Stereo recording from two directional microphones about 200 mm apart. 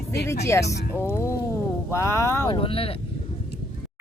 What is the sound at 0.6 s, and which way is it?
Speech, 55° left (ahead or behind).